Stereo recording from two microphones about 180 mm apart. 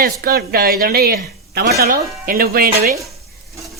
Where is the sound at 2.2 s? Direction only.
55° right (ahead or behind).